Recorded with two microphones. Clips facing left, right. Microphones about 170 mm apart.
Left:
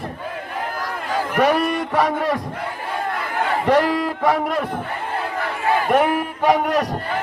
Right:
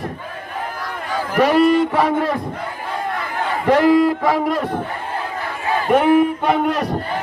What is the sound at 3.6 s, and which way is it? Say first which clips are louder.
Speech: right 6 dB; centre (ahead or behind).